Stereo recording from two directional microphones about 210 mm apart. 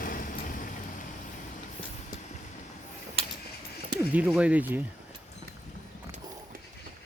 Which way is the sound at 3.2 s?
30° right (ahead or behind).